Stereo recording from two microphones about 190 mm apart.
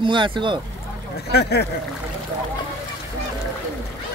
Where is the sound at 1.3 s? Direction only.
60° left (ahead or behind).